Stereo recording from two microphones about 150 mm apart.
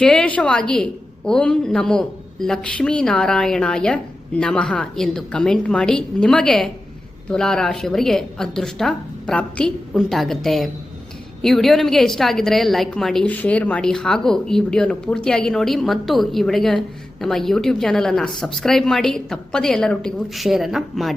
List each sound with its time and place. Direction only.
0.0 s a woman's voice: 5° left (ahead or behind)